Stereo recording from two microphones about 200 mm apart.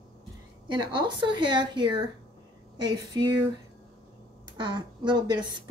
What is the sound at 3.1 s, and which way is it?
Speech, 20° right (ahead or behind).